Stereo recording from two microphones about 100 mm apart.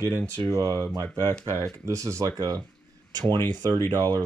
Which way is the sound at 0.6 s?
35° right (ahead or behind).